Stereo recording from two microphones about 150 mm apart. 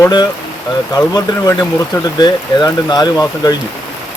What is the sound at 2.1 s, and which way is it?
Speech, 30° left (ahead or behind).